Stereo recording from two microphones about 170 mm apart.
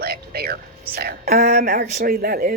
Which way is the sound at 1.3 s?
45° right (ahead or behind).